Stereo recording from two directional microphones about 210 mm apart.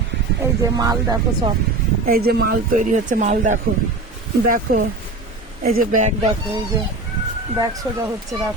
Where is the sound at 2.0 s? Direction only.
45° right (ahead or behind).